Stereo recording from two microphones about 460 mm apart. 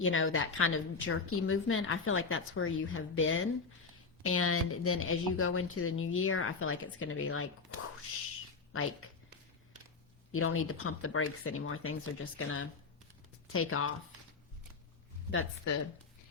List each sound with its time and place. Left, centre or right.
0.0 s a woman's voice: left
8.7 s a woman's voice: left
10.3 s a woman's voice: left
15.3 s a woman's voice: left